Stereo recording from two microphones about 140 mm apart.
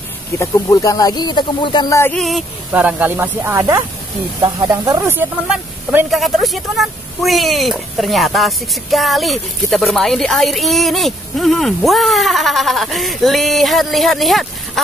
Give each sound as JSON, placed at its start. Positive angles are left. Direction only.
{"t": 0.4, "sound": "speech", "side_deg": 20}
{"t": 2.1, "sound": "speech", "side_deg": 0}
{"t": 2.7, "sound": "speech", "side_deg": -10}
{"t": 6.0, "sound": "speech", "side_deg": 0}